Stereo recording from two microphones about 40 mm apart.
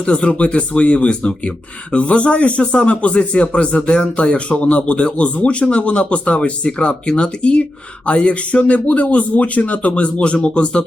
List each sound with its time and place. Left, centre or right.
0.0 s speech: left